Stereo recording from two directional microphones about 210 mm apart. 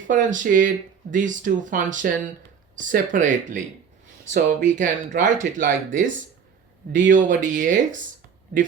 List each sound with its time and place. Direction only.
0.1 s speech: 40° right (ahead or behind)